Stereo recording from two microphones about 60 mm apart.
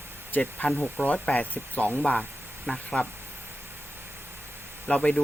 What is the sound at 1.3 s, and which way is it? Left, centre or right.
Speech, left.